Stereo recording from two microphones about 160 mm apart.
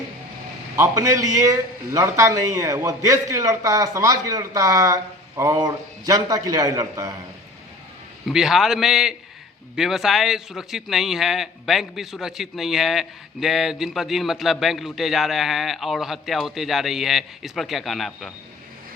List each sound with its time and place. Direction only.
0.8 s a man's voice: 20° right (ahead or behind)
8.3 s a man's voice: 5° right (ahead or behind)